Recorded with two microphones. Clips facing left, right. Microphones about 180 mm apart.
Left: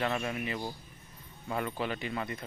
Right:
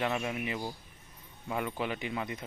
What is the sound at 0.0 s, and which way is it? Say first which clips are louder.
Speech: even; 10° right (ahead or behind).